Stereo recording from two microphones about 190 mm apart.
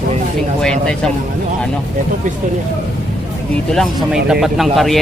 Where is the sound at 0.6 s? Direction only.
5° left (ahead or behind).